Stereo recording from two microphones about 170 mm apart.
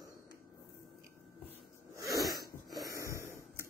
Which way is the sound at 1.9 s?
20° right (ahead or behind).